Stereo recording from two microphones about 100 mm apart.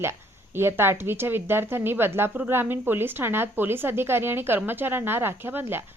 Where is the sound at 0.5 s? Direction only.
25° right (ahead or behind).